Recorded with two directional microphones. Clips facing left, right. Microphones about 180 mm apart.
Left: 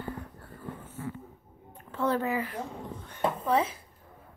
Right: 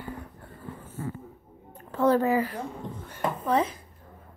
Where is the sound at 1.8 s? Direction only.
40° right (ahead or behind).